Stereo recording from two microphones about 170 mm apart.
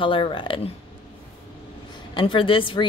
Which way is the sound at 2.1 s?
30° left (ahead or behind).